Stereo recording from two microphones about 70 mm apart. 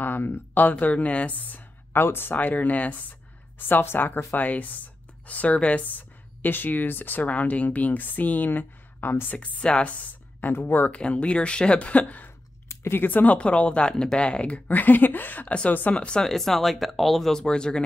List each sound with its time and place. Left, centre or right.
0.0 s speech: left
11.0 s speech: centre
12.6 s speech: left; by 17.8 s centre